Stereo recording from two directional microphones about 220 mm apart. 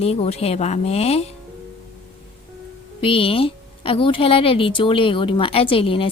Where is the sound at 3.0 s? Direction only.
25° left (ahead or behind).